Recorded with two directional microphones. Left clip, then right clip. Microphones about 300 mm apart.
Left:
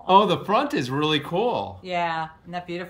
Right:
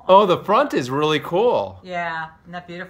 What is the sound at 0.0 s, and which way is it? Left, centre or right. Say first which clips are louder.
Speech: right 4 dB; centre.